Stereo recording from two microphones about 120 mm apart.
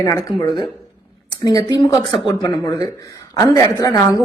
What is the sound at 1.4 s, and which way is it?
A woman's voice, 35° left (ahead or behind).